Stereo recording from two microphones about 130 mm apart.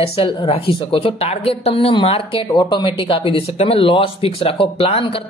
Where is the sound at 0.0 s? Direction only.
45° left (ahead or behind).